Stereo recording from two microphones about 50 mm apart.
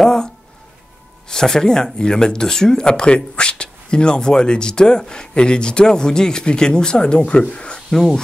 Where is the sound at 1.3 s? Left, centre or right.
Centre.